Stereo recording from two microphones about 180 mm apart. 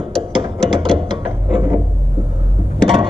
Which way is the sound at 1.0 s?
25° right (ahead or behind).